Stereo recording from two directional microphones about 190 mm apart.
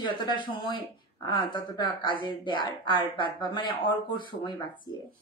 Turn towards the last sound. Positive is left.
turn(degrees=25)  # may be behind; listen again after turning